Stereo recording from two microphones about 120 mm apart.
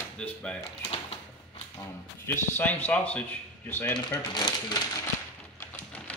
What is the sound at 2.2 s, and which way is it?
Speech, 20° left (ahead or behind).